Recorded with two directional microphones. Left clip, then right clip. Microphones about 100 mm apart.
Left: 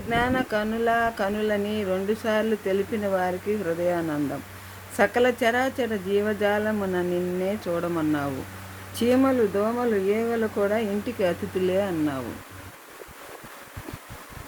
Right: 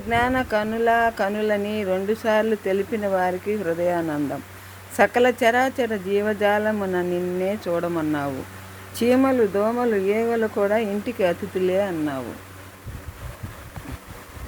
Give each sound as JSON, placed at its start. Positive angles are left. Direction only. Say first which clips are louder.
{"t": 0.1, "sound": "speech", "louder": "right 3 dB", "side_deg": 5}
{"t": 11.6, "sound": "speech", "louder": "right 2 dB", "side_deg": 20}